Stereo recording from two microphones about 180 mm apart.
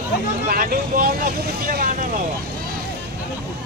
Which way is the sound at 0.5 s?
55° right (ahead or behind).